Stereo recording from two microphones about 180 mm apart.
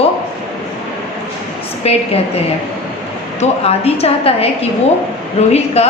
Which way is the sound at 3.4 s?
35° left (ahead or behind).